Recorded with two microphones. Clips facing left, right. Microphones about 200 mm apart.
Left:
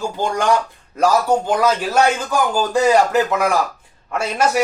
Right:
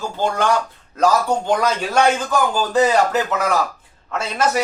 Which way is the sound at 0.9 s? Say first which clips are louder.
Left 1 dB; 10° left (ahead or behind).